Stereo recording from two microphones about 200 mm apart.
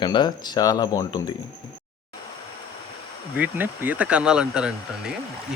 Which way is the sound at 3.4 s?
10° right (ahead or behind).